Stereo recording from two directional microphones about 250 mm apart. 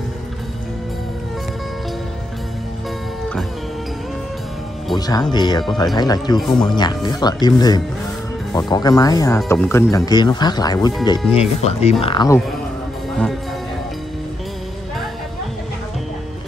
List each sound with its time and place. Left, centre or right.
4.9 s music: centre
5.3 s speech: centre